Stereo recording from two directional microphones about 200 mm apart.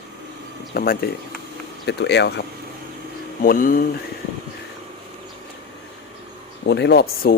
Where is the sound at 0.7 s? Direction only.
50° left (ahead or behind).